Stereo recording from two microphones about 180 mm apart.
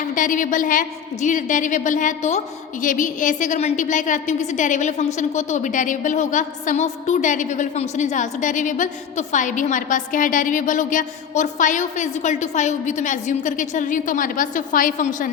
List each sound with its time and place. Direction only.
0.1 s a woman's voice: 45° left (ahead or behind)